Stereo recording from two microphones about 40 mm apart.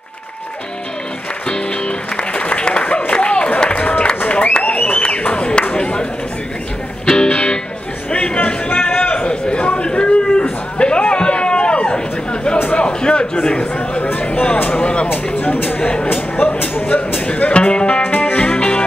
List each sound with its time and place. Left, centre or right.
1.5 s music: left
3.1 s a sound: left
7.1 s music: left
8.1 s chatter: left
9.1 s a sound: left
14.8 s speech: left
15.0 s speech: left
16.1 s a sound: left
17.3 s music: left
18.0 s music: left